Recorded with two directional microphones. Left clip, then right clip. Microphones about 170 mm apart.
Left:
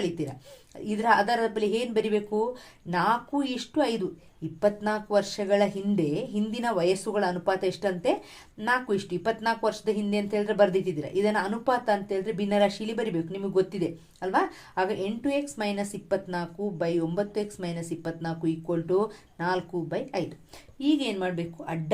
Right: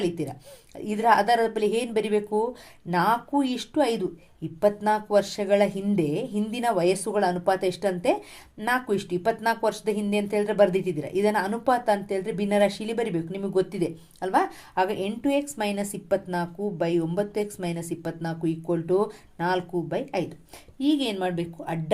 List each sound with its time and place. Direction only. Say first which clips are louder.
0.0 s a woman's voice: right 2 dB; 30° right (ahead or behind)